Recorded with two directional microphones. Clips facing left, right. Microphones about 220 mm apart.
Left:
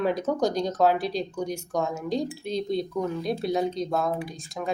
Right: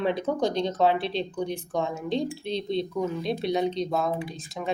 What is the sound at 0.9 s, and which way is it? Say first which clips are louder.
Speech: even; 30° right (ahead or behind).